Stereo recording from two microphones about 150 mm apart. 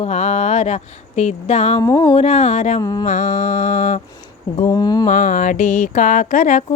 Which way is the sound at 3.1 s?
55° left (ahead or behind).